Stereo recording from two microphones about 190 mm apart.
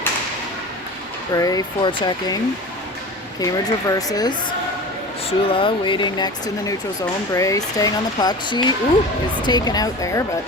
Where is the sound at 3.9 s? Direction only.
20° left (ahead or behind).